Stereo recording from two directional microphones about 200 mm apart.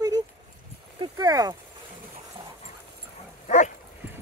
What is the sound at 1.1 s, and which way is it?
Speech, 20° right (ahead or behind).